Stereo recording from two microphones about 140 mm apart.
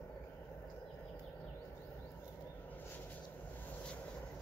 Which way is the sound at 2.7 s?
15° left (ahead or behind).